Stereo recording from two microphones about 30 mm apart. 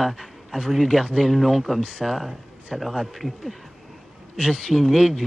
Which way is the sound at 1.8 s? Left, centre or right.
Left.